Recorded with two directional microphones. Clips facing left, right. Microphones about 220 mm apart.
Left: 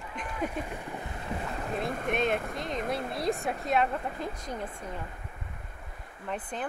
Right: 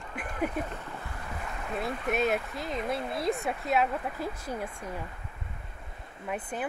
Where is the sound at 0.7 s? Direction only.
15° left (ahead or behind).